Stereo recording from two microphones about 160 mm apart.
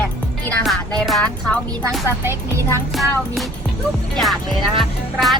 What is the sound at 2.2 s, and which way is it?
Speech, 15° right (ahead or behind).